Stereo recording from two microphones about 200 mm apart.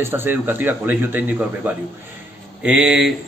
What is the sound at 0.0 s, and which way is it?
Speech, 10° right (ahead or behind).